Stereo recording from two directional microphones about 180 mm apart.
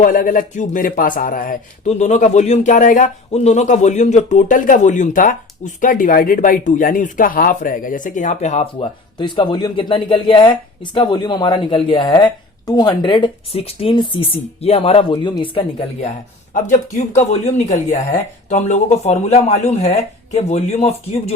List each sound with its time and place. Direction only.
0.0 s speech: 50° left (ahead or behind)
9.1 s speech: 25° left (ahead or behind)
16.6 s speech: 40° left (ahead or behind)